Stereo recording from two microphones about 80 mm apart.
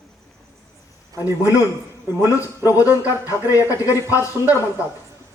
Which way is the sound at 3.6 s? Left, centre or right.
Left.